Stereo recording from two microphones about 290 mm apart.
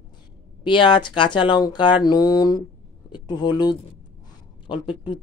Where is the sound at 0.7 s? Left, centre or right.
Centre.